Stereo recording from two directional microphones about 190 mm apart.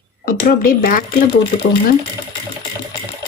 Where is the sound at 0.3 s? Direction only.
50° left (ahead or behind).